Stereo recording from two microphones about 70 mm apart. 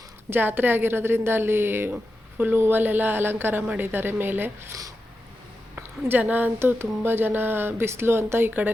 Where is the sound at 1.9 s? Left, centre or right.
Right.